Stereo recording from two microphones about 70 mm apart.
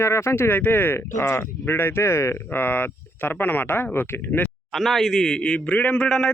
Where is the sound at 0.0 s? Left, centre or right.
Left.